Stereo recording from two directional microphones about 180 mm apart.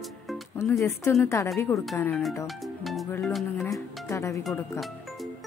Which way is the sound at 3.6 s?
15° left (ahead or behind).